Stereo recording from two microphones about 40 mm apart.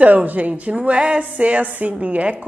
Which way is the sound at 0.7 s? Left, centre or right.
Right.